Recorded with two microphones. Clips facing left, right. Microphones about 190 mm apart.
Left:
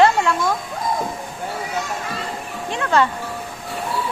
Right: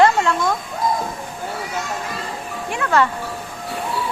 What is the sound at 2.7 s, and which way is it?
Music, 20° left (ahead or behind).